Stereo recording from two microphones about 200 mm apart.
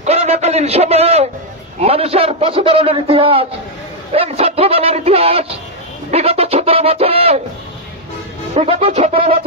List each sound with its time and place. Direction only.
0.0 s a man's voice: 30° right (ahead or behind)
8.5 s music: 30° right (ahead or behind)